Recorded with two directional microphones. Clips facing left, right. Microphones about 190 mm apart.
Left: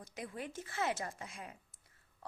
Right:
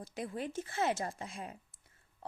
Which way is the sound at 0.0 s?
30° right (ahead or behind).